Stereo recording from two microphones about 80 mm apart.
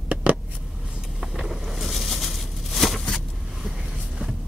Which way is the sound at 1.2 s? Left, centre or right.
Centre.